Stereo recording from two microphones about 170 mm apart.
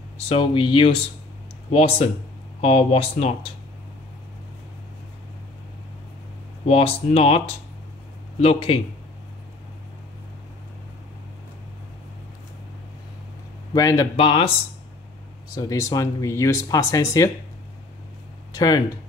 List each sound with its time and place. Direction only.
0.3 s speech: 30° left (ahead or behind)
6.7 s speech: 35° left (ahead or behind)
13.7 s speech: 20° left (ahead or behind)
14.1 s speech: 35° left (ahead or behind)
15.5 s speech: 20° left (ahead or behind)
18.5 s speech: 25° left (ahead or behind)